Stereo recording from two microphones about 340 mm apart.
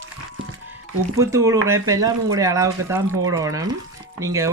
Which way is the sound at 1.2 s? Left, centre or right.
Centre.